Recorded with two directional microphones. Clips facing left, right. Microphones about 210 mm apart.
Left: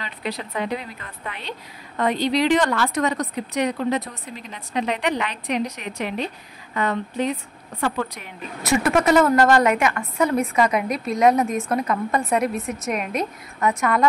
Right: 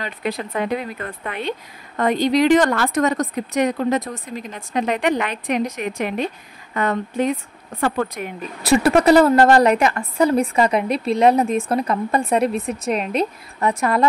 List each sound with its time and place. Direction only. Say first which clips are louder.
0.0 s speech: right 4 dB; 50° right (ahead or behind)
8.6 s a woman's voice: right 5 dB; 35° right (ahead or behind)